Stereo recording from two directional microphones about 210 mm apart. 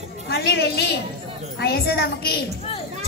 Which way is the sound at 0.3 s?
50° left (ahead or behind).